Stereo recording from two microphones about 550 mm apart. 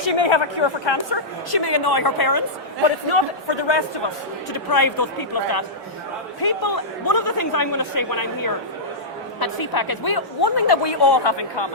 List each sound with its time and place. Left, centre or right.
0.2 s a man's voice: left
3.1 s speech: left
4.7 s a man's voice: left